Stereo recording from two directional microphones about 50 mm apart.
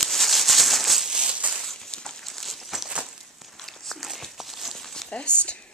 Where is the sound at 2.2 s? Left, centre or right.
Centre.